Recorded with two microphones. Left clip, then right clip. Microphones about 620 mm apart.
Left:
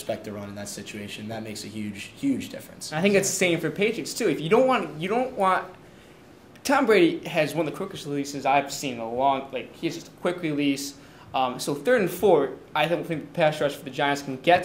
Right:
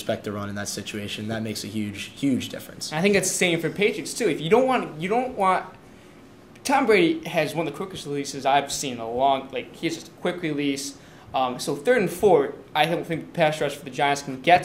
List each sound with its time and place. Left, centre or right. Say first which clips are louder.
0.0 s speech: right 4 dB; right
2.9 s speech: right 1 dB; centre
6.6 s speech: even; centre